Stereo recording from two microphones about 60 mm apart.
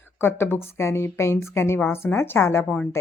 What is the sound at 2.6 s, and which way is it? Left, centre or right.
Speech, left.